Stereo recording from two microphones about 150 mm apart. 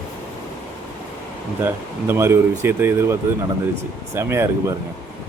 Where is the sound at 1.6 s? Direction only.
15° right (ahead or behind).